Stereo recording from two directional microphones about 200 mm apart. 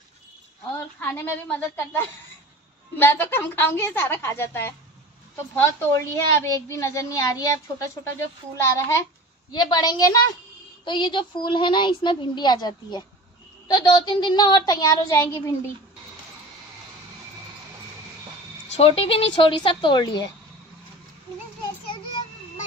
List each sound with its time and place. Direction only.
0.9 s a woman's voice: 10° left (ahead or behind)
3.0 s a woman's voice: 10° left (ahead or behind)
18.7 s a woman's voice: 30° left (ahead or behind)